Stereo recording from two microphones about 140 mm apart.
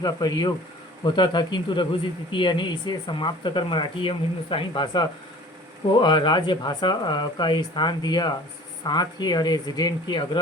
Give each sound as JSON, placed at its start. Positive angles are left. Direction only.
{"t": 0.0, "sound": "speech", "side_deg": 30}